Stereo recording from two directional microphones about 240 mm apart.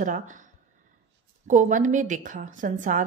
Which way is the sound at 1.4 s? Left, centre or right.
Right.